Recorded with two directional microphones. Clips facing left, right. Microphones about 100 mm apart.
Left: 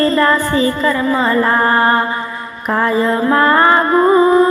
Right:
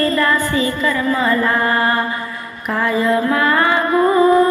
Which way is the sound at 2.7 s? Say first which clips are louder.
Left 2 dB; 35° left (ahead or behind).